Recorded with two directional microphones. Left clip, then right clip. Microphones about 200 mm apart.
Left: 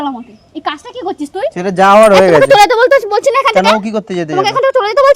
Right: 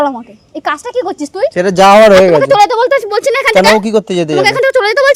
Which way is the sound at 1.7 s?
45° right (ahead or behind).